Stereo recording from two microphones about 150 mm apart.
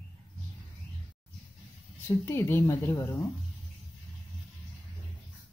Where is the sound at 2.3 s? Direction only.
15° left (ahead or behind).